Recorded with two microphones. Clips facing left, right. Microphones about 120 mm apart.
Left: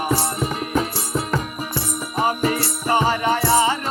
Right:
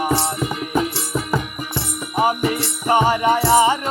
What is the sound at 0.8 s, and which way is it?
Music, 40° left (ahead or behind).